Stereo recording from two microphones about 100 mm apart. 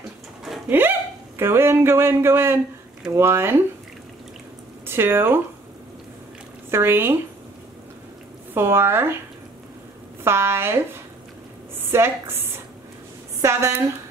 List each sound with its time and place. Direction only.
0.7 s speech: 20° right (ahead or behind)
4.8 s speech: 25° right (ahead or behind)
6.7 s speech: 25° right (ahead or behind)
8.5 s speech: 25° right (ahead or behind)
10.2 s speech: 25° right (ahead or behind)
11.9 s a woman's voice: 25° right (ahead or behind)